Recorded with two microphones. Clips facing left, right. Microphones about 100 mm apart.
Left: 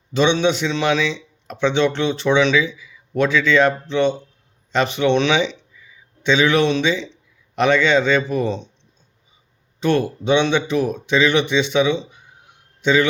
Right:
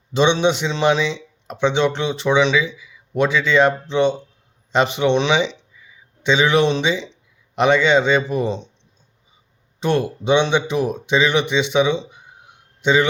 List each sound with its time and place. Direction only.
0.1 s a man's voice: 25° right (ahead or behind)
5.8 s a sound: 15° right (ahead or behind)
7.5 s a man's voice: 20° right (ahead or behind)
9.8 s a man's voice: 15° right (ahead or behind)